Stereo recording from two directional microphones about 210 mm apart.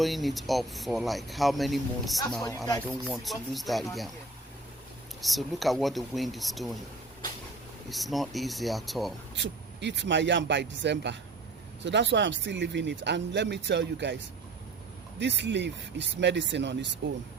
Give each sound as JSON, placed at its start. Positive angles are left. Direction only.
{"t": 0.0, "sound": "speech", "side_deg": 0}
{"t": 5.2, "sound": "speech", "side_deg": 0}
{"t": 7.9, "sound": "speech", "side_deg": 0}
{"t": 9.3, "sound": "speech", "side_deg": -55}
{"t": 15.2, "sound": "speech", "side_deg": -60}